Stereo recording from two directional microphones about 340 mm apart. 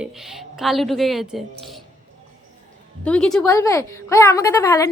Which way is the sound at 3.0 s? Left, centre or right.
Centre.